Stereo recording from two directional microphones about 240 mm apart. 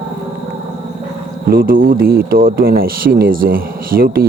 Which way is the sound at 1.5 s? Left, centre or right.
Right.